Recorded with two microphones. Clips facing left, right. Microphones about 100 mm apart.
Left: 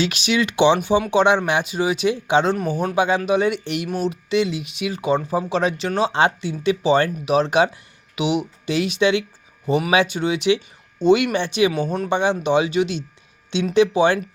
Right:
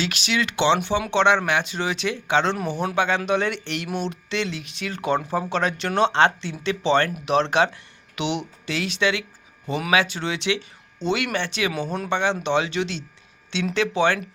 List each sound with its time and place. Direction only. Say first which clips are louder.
0.0 s speech: left 4 dB; 20° left (ahead or behind)
8.7 s speech: left 5 dB; 20° left (ahead or behind)
11.7 s speech: left 4 dB; 5° left (ahead or behind)